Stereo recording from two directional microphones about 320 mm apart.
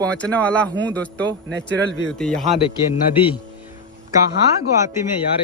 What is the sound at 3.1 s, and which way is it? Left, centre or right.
Speech, centre.